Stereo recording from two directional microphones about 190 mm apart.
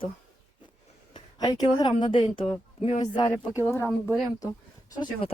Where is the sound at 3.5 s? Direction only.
15° right (ahead or behind).